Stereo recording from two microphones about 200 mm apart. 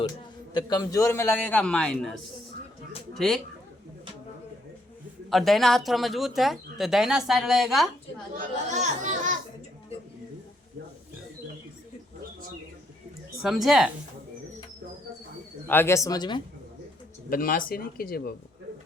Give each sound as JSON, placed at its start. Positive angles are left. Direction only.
{"t": 0.5, "sound": "a man's voice", "side_deg": 20}
{"t": 5.3, "sound": "speech", "side_deg": 0}
{"t": 8.7, "sound": "music", "side_deg": -35}
{"t": 13.4, "sound": "speech", "side_deg": 0}
{"t": 15.6, "sound": "a man's voice", "side_deg": 10}
{"t": 17.2, "sound": "speech", "side_deg": 45}